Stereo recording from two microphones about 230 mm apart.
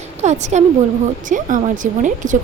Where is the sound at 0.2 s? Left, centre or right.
Right.